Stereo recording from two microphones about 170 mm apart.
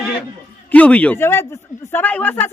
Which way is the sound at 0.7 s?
10° left (ahead or behind).